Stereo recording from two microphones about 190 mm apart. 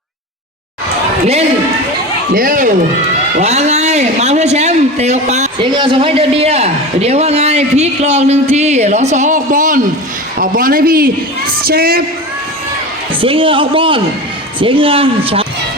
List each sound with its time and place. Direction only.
2.3 s a man's voice: 45° right (ahead or behind)
5.7 s a man's voice: 25° right (ahead or behind); by 12.0 s 50° right (ahead or behind)
13.2 s a man's voice: 30° right (ahead or behind)